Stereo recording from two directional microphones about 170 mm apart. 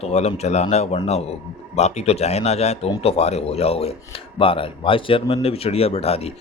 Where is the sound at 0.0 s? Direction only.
40° left (ahead or behind).